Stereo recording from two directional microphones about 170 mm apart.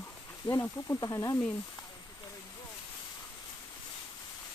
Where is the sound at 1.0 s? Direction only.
20° left (ahead or behind).